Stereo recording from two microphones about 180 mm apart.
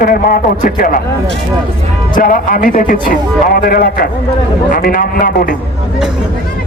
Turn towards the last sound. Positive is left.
turn(degrees=50)  # may be behind; listen again after turning